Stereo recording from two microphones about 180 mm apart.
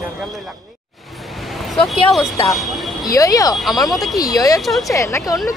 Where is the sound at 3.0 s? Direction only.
20° left (ahead or behind).